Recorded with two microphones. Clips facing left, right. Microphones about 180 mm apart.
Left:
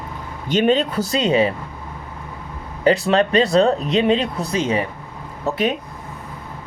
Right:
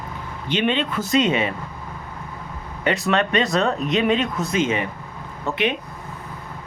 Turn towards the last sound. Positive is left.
turn(degrees=40)  # may be behind; listen again after turning